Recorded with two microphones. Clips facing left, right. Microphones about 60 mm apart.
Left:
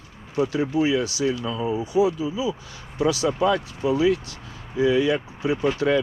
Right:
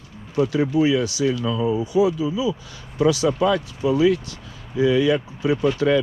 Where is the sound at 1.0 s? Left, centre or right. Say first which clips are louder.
Right 3 dB; left.